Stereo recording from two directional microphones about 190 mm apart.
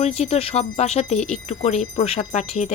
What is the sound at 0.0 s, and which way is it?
Speech, 35° left (ahead or behind).